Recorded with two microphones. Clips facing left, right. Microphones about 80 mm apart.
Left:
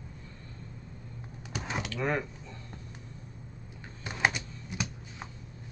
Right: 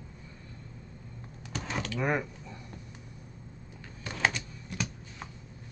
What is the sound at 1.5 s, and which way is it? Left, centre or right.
Typing, centre.